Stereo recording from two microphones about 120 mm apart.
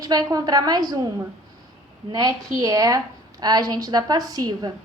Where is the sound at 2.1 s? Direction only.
35° right (ahead or behind).